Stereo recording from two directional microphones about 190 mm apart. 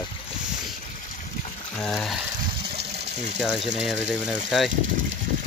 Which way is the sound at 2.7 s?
35° right (ahead or behind).